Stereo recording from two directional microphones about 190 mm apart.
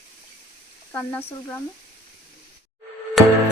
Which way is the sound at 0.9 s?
10° left (ahead or behind).